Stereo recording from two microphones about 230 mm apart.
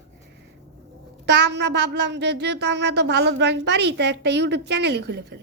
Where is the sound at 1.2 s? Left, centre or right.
Right.